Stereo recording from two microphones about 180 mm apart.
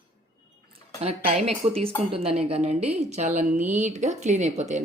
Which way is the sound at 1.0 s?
35° right (ahead or behind).